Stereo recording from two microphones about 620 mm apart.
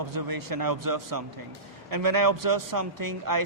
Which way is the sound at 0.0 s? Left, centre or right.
Right.